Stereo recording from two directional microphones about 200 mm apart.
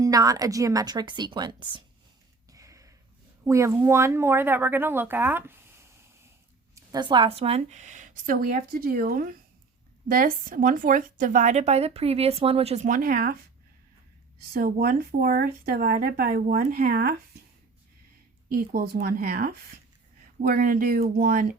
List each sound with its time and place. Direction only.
0.0 s a woman's voice: 20° right (ahead or behind)
2.5 s a sound: 15° right (ahead or behind)
3.4 s a woman's voice: 15° right (ahead or behind); by 13.4 s 45° right (ahead or behind)
14.5 s speech: 50° right (ahead or behind)
18.5 s speech: 50° right (ahead or behind)